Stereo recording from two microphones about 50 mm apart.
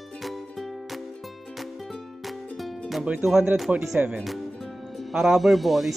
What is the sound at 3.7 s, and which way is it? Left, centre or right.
Speech, centre.